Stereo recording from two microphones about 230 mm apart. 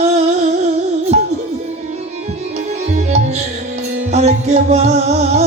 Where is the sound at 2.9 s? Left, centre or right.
Right.